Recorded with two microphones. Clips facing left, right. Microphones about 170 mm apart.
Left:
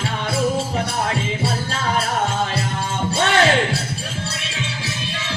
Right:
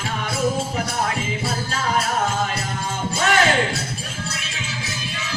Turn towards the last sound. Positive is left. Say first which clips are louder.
# left 2 dB
turn(degrees=30)  # may be behind; listen again after turning